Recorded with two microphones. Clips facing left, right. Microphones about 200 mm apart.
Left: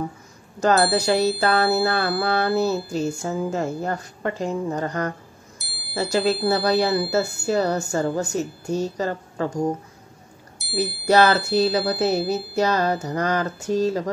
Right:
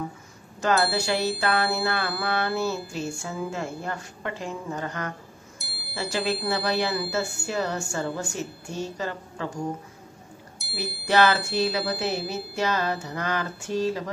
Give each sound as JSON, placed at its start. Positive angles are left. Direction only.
{"t": 0.6, "sound": "speech", "side_deg": 40}
{"t": 5.6, "sound": "music", "side_deg": 0}
{"t": 5.9, "sound": "speech", "side_deg": 40}
{"t": 10.6, "sound": "a sound", "side_deg": 0}
{"t": 11.1, "sound": "speech", "side_deg": 40}